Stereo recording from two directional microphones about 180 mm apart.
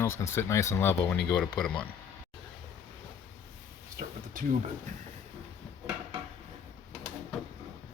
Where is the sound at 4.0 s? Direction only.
50° right (ahead or behind).